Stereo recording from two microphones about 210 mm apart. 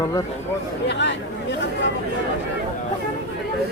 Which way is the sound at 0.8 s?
55° left (ahead or behind).